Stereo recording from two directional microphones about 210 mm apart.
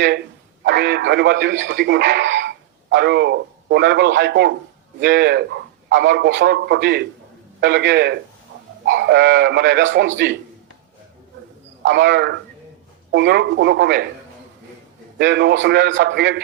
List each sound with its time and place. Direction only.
0.6 s a man's voice: 55° right (ahead or behind)
11.9 s speech: 55° right (ahead or behind)
15.2 s speech: 55° right (ahead or behind)